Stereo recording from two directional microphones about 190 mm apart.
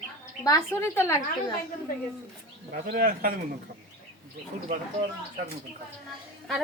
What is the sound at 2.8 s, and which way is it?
Speech, 50° right (ahead or behind).